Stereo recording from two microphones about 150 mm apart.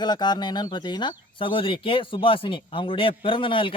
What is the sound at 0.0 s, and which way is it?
Speech, 30° left (ahead or behind).